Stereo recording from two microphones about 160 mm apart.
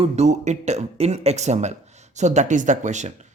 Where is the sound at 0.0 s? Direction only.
45° right (ahead or behind).